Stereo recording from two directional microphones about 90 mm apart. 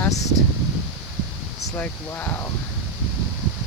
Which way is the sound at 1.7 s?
20° left (ahead or behind).